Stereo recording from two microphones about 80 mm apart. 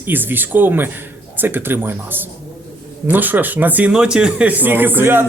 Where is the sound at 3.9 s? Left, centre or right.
Centre.